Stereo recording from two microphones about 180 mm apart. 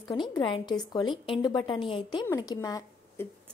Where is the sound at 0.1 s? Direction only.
25° left (ahead or behind).